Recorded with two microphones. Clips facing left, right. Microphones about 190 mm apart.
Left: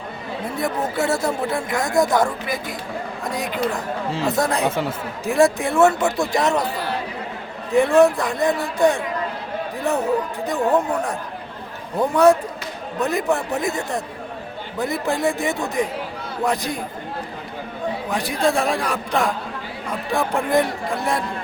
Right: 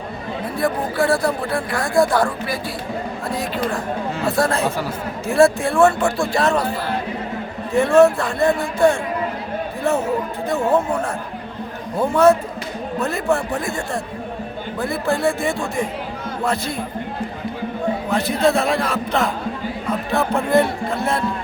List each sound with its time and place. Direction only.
0.6 s a man's voice: 20° left (ahead or behind)
7.7 s a man's voice: 15° left (ahead or behind)
11.9 s a man's voice: 15° left (ahead or behind)
18.1 s a man's voice: 15° left (ahead or behind)